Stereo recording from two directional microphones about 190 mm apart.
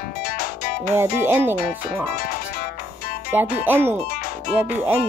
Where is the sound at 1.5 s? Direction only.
45° left (ahead or behind).